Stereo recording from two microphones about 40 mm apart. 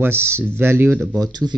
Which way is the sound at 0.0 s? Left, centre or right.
Right.